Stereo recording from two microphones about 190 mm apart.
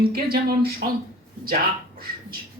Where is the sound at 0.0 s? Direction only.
55° right (ahead or behind).